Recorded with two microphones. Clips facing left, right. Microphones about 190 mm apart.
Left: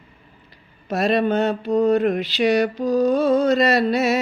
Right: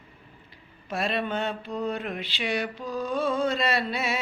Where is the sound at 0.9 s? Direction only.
40° left (ahead or behind).